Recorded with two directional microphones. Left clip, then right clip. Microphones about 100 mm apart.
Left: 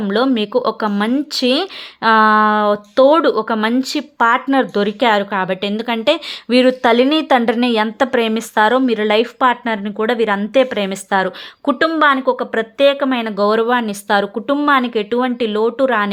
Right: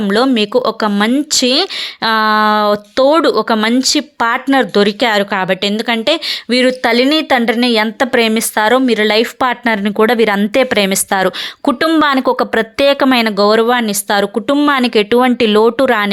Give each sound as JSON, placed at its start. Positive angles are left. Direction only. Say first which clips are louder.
{"t": 0.0, "sound": "a woman's voice", "louder": "right 4 dB", "side_deg": -25}
{"t": 13.1, "sound": "speech", "louder": "right 5 dB", "side_deg": -30}